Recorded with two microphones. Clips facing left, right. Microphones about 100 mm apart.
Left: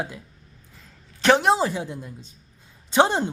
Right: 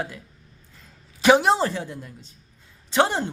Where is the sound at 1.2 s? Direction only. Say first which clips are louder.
Right 1 dB; 5° right (ahead or behind).